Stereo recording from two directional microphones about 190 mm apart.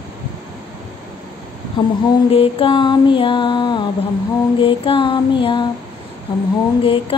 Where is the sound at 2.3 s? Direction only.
30° left (ahead or behind).